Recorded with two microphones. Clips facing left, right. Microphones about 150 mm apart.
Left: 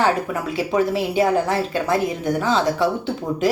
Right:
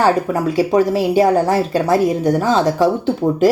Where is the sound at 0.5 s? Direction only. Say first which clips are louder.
Right 5 dB; 40° right (ahead or behind).